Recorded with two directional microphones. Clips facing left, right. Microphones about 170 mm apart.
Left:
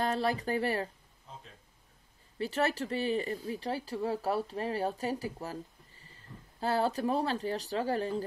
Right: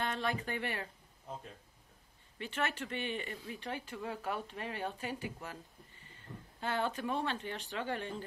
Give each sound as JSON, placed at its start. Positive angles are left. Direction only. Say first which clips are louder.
{"t": 0.0, "sound": "speech", "louder": "left 6 dB", "side_deg": 35}
{"t": 2.3, "sound": "speech", "louder": "left 7 dB", "side_deg": 35}